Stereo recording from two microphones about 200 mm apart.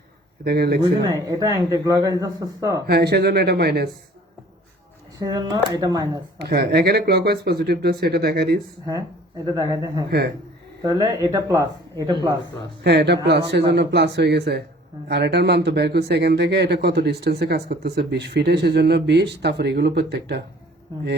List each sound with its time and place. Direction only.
0.4 s speech: 55° right (ahead or behind)
1.3 s a man's voice: 20° right (ahead or behind)
2.8 s speech: 55° right (ahead or behind)
5.2 s speech: 20° right (ahead or behind)
6.4 s speech: 50° right (ahead or behind)
8.9 s a man's voice: 15° right (ahead or behind)
10.1 s speech: 55° right (ahead or behind)
10.8 s a man's voice: 15° right (ahead or behind)
12.8 s speech: 60° right (ahead or behind)